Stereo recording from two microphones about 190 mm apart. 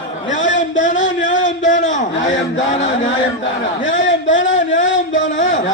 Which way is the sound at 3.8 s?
75° left (ahead or behind).